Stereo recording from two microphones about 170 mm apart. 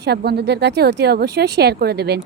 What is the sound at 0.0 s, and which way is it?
A woman's voice, 75° right (ahead or behind).